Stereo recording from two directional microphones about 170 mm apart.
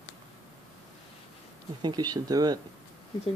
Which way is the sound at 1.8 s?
25° right (ahead or behind).